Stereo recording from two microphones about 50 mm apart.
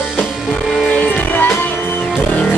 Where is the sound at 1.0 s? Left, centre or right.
Left.